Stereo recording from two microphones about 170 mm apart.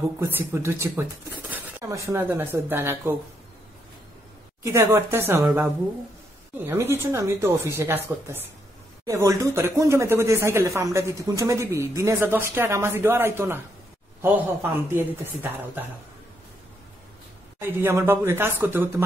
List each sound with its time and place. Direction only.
0.2 s speech: 15° right (ahead or behind)
4.6 s speech: 15° right (ahead or behind)
6.6 s speech: 15° right (ahead or behind)
17.6 s speech: 15° right (ahead or behind)